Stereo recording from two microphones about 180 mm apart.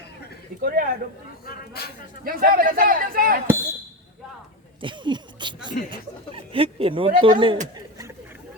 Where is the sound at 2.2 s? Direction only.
55° right (ahead or behind).